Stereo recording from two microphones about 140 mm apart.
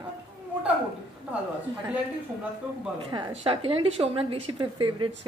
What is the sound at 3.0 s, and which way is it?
A woman's voice, 30° right (ahead or behind).